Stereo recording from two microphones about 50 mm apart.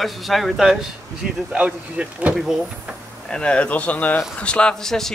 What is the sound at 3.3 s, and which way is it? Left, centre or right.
Speech, left.